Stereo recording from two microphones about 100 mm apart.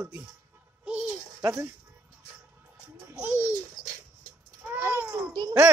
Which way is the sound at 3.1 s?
15° right (ahead or behind).